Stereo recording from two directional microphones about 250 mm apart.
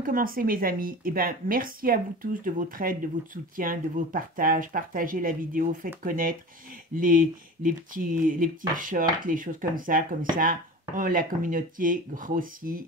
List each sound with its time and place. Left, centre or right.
0.0 s speech: right